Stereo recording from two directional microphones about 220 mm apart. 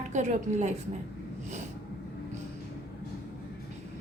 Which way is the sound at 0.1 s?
35° right (ahead or behind).